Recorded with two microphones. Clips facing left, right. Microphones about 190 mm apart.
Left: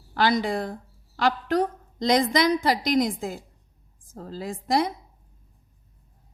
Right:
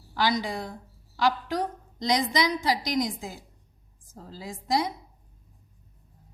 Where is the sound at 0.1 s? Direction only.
55° left (ahead or behind).